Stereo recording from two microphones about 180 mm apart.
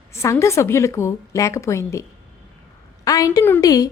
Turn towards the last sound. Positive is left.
turn(degrees=20)  # may be behind; listen again after turning